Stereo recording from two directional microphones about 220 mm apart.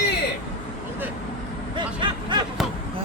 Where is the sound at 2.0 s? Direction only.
20° right (ahead or behind).